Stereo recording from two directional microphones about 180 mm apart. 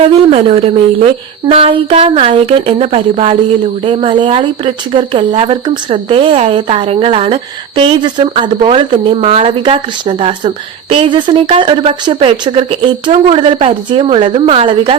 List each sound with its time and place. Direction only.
0.0 s speech: 35° right (ahead or behind)